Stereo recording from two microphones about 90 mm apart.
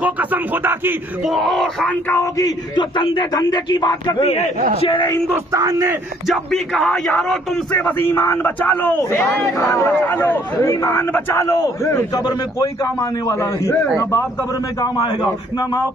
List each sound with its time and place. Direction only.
0.0 s music: 20° right (ahead or behind)
1.2 s speech: centre (ahead or behind)
1.9 s speech: 20° left (ahead or behind)
2.3 s a man's voice: 40° left (ahead or behind)
2.8 s a man's voice: 70° left (ahead or behind)
3.3 s a man's voice: 50° left (ahead or behind)
5.3 s speech: 35° right (ahead or behind)
6.2 s speech: centre (ahead or behind)
8.0 s a man's voice: 25° left (ahead or behind)
9.8 s speech: 20° left (ahead or behind)
11.4 s a man's voice: 40° left (ahead or behind)
12.8 s a man's voice: 35° left (ahead or behind)
14.8 s a man's voice: 45° left (ahead or behind)